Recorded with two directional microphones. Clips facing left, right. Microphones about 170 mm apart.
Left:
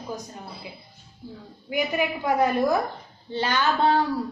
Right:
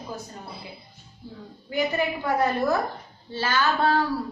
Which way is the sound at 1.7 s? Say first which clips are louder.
Even; 10° left (ahead or behind).